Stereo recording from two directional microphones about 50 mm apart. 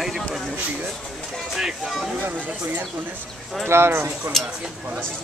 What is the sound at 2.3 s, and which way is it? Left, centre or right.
Speech, right.